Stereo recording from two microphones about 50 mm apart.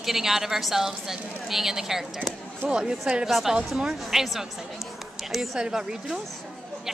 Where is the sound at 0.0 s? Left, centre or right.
Centre.